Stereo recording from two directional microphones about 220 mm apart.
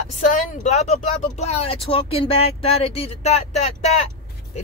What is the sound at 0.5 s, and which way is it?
Speech, 30° left (ahead or behind).